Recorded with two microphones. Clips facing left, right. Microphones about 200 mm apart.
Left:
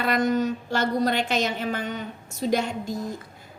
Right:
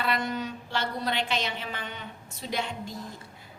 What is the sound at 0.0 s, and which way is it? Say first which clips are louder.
A woman's voice: left 7 dB; 45° left (ahead or behind).